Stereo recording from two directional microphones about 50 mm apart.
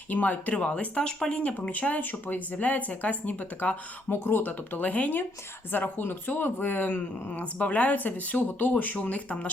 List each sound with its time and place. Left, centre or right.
0.1 s speech: left
4.1 s speech: left